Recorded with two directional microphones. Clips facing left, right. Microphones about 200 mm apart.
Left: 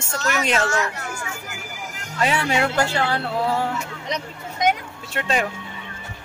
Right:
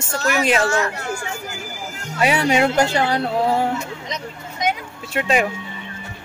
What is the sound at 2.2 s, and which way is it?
Speech, 15° right (ahead or behind).